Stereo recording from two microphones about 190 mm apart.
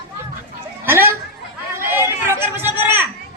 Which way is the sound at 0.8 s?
10° right (ahead or behind).